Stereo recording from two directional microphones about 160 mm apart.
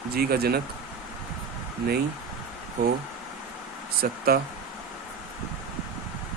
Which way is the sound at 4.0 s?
70° right (ahead or behind).